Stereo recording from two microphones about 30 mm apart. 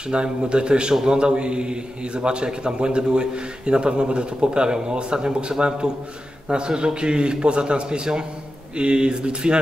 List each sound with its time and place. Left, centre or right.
0.1 s a man's voice: right